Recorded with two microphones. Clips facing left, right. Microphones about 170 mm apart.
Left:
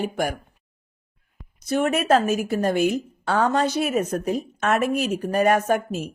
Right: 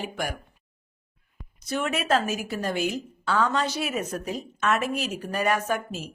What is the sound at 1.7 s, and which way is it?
A woman's voice, 50° left (ahead or behind).